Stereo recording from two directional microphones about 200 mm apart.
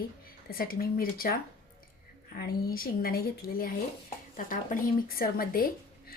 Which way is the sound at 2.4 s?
45° left (ahead or behind).